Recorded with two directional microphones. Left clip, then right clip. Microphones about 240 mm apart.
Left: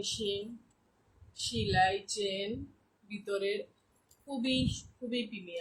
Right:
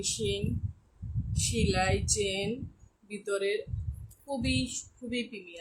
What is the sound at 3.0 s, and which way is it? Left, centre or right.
Speech, right.